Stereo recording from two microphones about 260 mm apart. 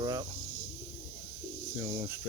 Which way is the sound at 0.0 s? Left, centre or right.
Centre.